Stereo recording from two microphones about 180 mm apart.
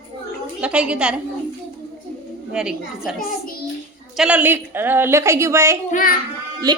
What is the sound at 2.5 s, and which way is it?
Speech, 5° right (ahead or behind).